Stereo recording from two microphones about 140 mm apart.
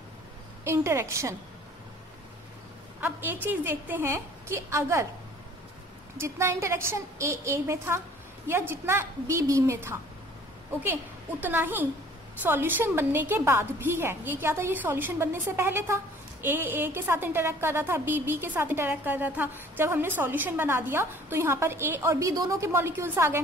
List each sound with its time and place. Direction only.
0.7 s a woman's voice: 20° right (ahead or behind)
3.0 s a woman's voice: 15° right (ahead or behind)
6.1 s a woman's voice: 20° right (ahead or behind)
11.4 s a woman's voice: 15° right (ahead or behind)